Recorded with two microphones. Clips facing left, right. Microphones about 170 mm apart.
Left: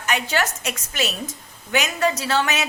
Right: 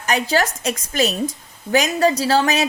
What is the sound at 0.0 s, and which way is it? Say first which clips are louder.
A woman's voice: right 4 dB; 40° right (ahead or behind).